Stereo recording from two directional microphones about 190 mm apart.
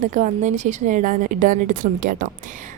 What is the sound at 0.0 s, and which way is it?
A woman's voice, 40° right (ahead or behind).